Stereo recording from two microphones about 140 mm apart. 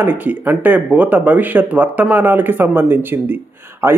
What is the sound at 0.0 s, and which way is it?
A man's voice, 10° right (ahead or behind).